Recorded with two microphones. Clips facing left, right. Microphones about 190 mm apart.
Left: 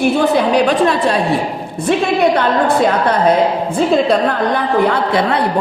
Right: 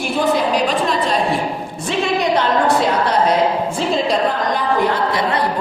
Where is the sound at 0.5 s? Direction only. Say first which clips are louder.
Left 5 dB; 65° left (ahead or behind).